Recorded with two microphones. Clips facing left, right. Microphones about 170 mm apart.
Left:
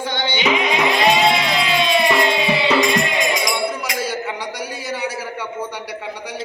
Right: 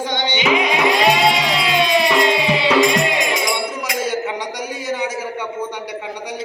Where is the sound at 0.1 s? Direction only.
15° right (ahead or behind).